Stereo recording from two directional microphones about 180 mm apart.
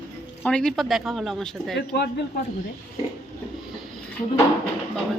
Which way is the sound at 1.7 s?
70° left (ahead or behind).